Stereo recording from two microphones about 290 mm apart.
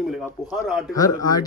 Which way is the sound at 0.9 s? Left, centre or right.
Centre.